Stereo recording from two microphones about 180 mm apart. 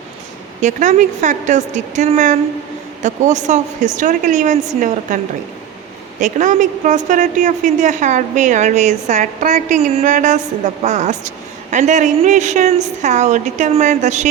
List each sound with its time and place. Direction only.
0.6 s a woman's voice: 40° right (ahead or behind)